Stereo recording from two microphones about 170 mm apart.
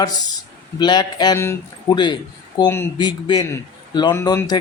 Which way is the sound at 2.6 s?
15° left (ahead or behind).